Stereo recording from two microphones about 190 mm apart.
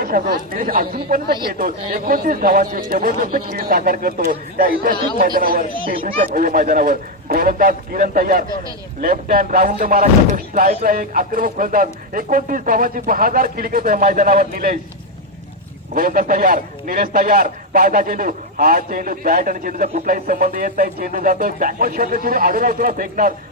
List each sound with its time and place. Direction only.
0.0 s speech: 50° right (ahead or behind)
16.0 s speech: 50° right (ahead or behind)